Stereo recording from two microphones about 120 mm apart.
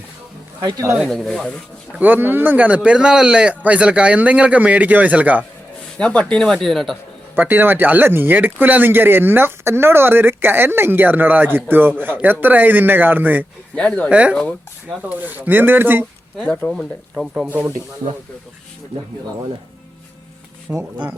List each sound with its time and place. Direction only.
0.6 s speech: 25° right (ahead or behind)
0.9 s speech: centre (ahead or behind)
1.9 s speech: 15° right (ahead or behind)
6.0 s speech: 10° left (ahead or behind)
7.3 s speech: 15° right (ahead or behind)
13.7 s speech: 10° left (ahead or behind)
14.1 s speech: 10° right (ahead or behind)
16.4 s speech: 10° left (ahead or behind)
17.2 s speech: 5° right (ahead or behind)
20.7 s speech: 10° right (ahead or behind)